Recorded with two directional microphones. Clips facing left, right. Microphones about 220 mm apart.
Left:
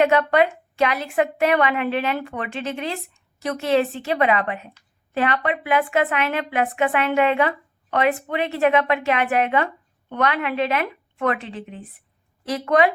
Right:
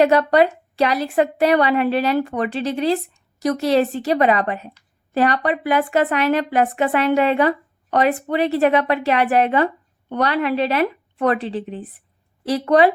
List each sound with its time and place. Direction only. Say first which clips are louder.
0.0 s a woman's voice: right 3 dB; 35° right (ahead or behind)